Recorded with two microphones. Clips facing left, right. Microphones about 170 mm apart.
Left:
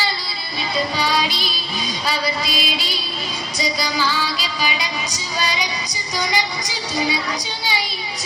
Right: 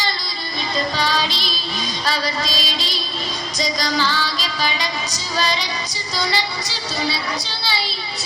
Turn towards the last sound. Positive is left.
turn(degrees=15)  # may be behind; listen again after turning